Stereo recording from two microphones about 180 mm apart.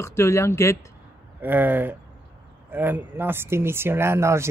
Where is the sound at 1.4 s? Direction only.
10° right (ahead or behind).